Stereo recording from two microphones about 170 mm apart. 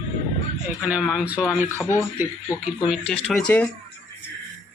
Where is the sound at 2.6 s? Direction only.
5° right (ahead or behind).